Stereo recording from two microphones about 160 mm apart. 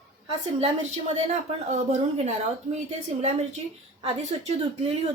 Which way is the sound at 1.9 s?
45° right (ahead or behind).